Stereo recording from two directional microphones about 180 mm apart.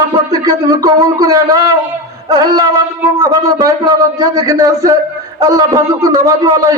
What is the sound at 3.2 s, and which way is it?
Speech, 20° right (ahead or behind).